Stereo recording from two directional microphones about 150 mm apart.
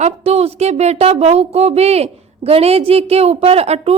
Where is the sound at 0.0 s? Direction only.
45° right (ahead or behind).